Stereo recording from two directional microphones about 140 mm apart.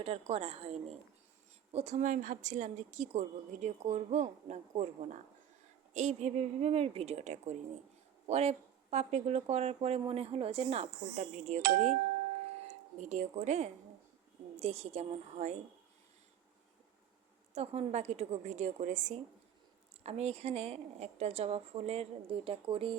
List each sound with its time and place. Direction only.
0.0 s a woman's voice: 45° right (ahead or behind)
12.4 s doorbell: 50° right (ahead or behind)
14.5 s speech: 50° right (ahead or behind)
17.5 s speech: 45° right (ahead or behind)